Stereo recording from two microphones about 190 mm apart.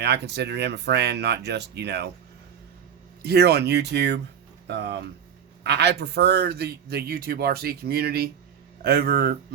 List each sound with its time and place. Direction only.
0.0 s a man's voice: 60° right (ahead or behind)
3.2 s a man's voice: 60° right (ahead or behind)